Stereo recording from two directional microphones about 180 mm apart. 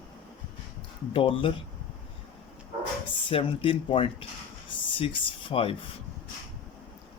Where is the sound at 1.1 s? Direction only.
30° left (ahead or behind).